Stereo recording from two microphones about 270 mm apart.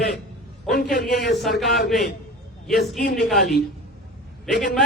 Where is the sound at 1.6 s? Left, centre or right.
Centre.